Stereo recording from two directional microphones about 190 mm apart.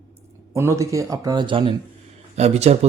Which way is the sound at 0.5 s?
15° right (ahead or behind).